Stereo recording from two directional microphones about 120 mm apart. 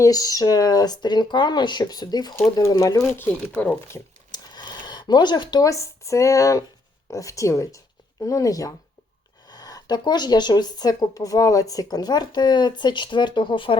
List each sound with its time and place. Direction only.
0.0 s speech: 30° left (ahead or behind)
3.2 s speech: 10° left (ahead or behind)
4.3 s speech: 35° left (ahead or behind)